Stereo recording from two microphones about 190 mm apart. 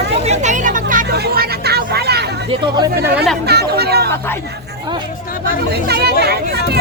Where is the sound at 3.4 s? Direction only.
60° right (ahead or behind).